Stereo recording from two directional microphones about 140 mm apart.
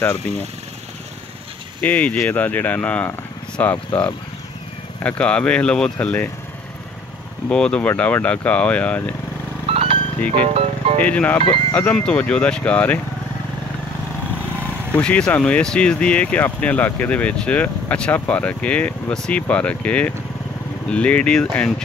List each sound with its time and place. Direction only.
1.8 s speech: 10° left (ahead or behind)
7.4 s speech: 5° left (ahead or behind)
9.7 s a sound: 45° right (ahead or behind)
10.3 s speech: 45° right (ahead or behind)
11.0 s speech: 10° left (ahead or behind)
15.0 s speech: 5° left (ahead or behind)